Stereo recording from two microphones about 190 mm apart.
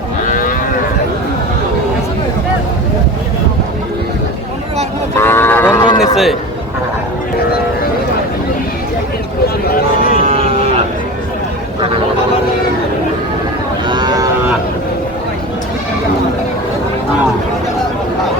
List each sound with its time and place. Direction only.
0.3 s moo: 45° left (ahead or behind)
5.1 s cattle: 10° left (ahead or behind)
6.0 s a sound: centre (ahead or behind)
9.6 s a sound: 50° left (ahead or behind)
10.2 s vehicle: 30° right (ahead or behind)
13.8 s cattle: 20° right (ahead or behind)